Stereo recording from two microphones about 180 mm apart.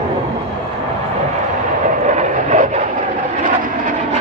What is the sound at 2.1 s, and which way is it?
Vehicle, 40° right (ahead or behind).